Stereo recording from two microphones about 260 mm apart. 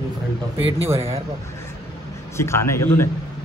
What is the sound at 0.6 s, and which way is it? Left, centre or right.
Speech, right.